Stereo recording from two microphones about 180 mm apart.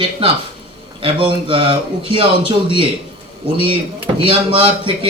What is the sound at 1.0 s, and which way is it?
Speech, 30° right (ahead or behind).